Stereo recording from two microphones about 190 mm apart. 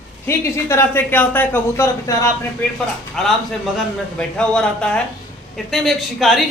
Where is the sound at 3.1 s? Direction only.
Centre (ahead or behind).